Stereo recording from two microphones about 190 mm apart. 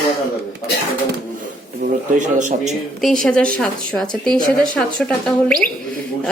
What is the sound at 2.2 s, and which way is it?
Speech, 40° right (ahead or behind).